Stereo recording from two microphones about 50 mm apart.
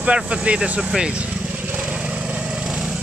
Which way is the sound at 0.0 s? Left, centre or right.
Right.